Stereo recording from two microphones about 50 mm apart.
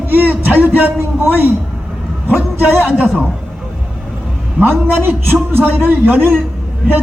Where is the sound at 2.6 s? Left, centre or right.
Right.